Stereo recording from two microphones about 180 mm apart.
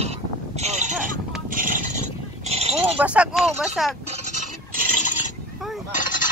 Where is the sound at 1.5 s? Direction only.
50° right (ahead or behind).